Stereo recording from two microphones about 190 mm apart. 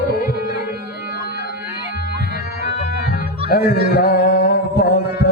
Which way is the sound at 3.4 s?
55° left (ahead or behind).